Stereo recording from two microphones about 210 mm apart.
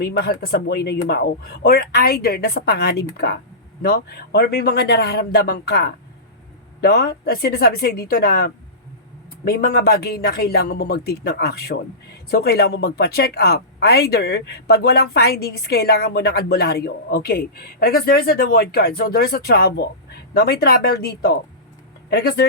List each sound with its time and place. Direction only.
0.0 s speech: 50° left (ahead or behind)